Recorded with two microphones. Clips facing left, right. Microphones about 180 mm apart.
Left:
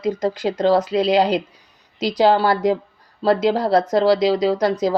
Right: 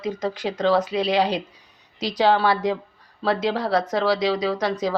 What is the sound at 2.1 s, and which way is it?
Speech, 40° left (ahead or behind).